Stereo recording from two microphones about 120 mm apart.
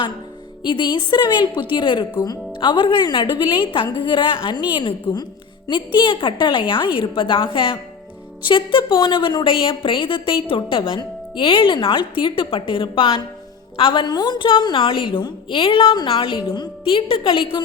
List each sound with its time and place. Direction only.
0.6 s a woman's voice: 40° left (ahead or behind)